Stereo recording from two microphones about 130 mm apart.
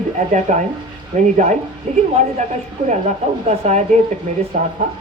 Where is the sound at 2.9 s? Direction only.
65° right (ahead or behind).